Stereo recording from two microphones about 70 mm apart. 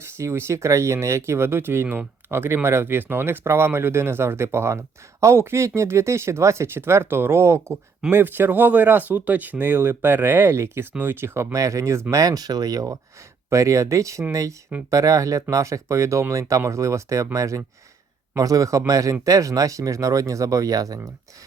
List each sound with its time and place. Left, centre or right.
0.0 s speech: right
8.1 s speech: right
11.5 s speech: right
12.1 s speech: right